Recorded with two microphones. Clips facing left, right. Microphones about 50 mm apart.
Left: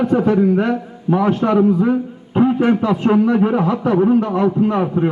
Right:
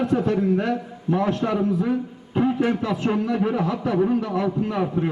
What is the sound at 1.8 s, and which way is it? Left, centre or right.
Music, left.